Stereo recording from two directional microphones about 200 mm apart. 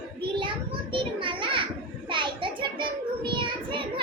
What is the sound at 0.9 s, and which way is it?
Children playing, 25° right (ahead or behind).